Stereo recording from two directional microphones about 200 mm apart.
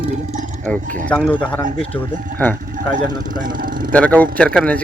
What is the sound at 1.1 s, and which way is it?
Speech, 5° left (ahead or behind).